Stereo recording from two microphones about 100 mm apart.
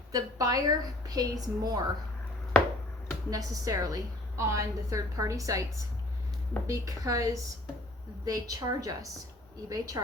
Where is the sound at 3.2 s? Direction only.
40° right (ahead or behind).